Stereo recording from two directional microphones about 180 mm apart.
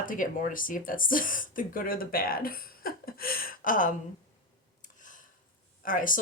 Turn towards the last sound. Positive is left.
turn(degrees=50)  # may be behind; listen again after turning